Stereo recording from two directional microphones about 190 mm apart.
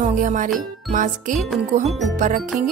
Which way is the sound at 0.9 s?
40° right (ahead or behind).